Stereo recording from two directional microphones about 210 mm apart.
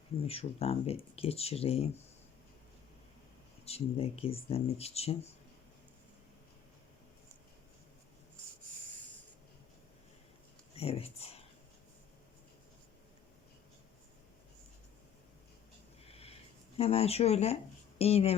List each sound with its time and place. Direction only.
0.3 s speech: 30° left (ahead or behind)
3.7 s speech: 30° left (ahead or behind)
10.8 s speech: 30° left (ahead or behind)
16.0 s a sound: 30° left (ahead or behind)
18.0 s speech: 30° left (ahead or behind)